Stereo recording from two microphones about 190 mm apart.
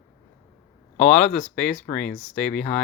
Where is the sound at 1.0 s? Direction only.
5° left (ahead or behind).